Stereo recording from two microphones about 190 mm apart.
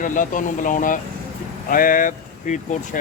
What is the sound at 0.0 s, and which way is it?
Speech, 45° left (ahead or behind).